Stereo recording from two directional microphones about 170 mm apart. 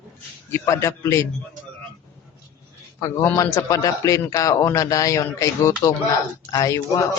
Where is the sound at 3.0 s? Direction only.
20° left (ahead or behind).